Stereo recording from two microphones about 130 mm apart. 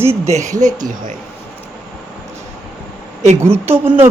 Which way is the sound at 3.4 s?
15° right (ahead or behind).